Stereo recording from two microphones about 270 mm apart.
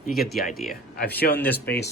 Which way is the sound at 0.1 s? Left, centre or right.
Centre.